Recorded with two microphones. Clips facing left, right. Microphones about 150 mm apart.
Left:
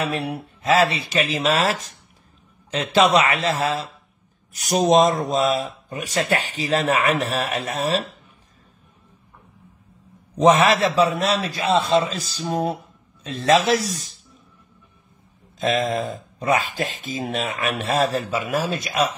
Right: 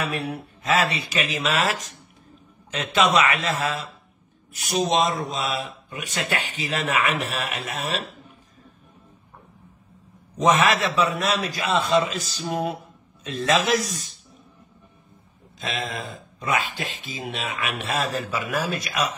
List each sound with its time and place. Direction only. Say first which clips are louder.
0.0 s speech: left 3 dB; 30° left (ahead or behind)
4.6 s speech: left 6 dB; 40° left (ahead or behind)
10.3 s speech: left 4 dB; 30° left (ahead or behind)
15.6 s speech: left 9 dB; 40° left (ahead or behind)